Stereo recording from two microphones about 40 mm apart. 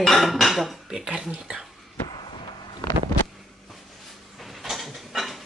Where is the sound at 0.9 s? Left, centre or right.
Centre.